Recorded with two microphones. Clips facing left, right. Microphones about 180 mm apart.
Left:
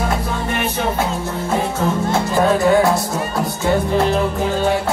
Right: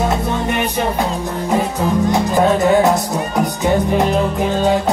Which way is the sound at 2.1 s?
20° right (ahead or behind).